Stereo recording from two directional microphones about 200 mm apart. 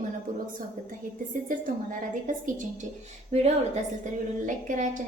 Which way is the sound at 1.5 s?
40° right (ahead or behind).